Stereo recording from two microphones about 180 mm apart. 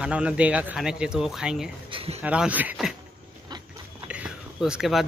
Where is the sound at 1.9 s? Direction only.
30° right (ahead or behind).